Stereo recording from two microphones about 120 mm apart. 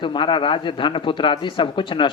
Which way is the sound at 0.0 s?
45° left (ahead or behind).